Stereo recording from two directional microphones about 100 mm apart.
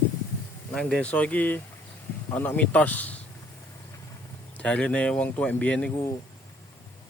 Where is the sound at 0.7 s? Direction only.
5° left (ahead or behind).